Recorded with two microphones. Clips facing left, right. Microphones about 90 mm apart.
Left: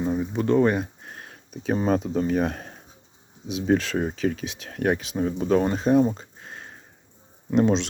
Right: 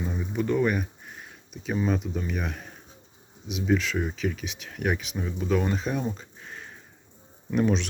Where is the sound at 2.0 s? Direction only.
45° left (ahead or behind).